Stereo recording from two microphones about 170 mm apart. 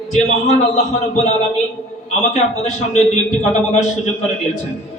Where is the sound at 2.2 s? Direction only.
40° left (ahead or behind).